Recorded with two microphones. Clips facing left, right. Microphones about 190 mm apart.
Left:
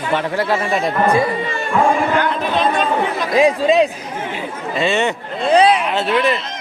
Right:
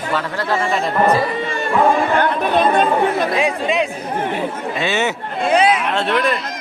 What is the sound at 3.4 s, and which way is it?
Speech, 35° left (ahead or behind).